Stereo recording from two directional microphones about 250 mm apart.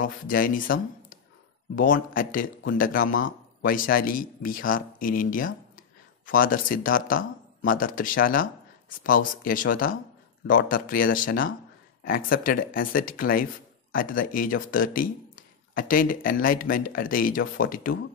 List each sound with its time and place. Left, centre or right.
0.0 s speech: left